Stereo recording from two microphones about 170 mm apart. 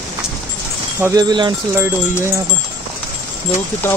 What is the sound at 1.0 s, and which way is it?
Speech, 20° right (ahead or behind).